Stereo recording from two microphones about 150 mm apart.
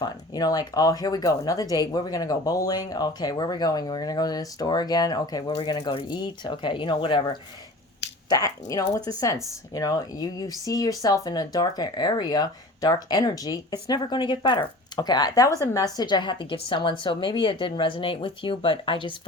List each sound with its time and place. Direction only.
0.0 s speech: 25° left (ahead or behind)
8.3 s speech: 25° left (ahead or behind)